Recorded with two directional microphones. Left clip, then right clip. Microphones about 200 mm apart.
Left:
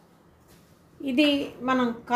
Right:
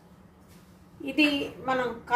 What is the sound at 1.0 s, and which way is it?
A woman's voice, 50° left (ahead or behind).